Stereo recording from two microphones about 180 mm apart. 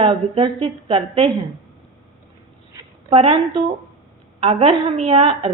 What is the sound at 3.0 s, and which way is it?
A woman's voice, 35° right (ahead or behind).